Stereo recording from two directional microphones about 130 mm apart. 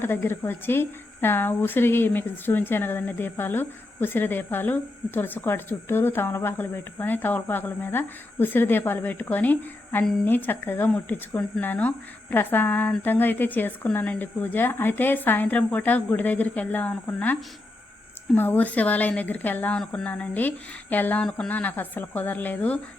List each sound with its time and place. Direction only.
0.0 s speech: 15° left (ahead or behind)
18.3 s speech: 15° left (ahead or behind)